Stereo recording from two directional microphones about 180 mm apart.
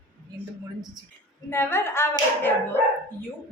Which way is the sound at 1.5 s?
15° left (ahead or behind).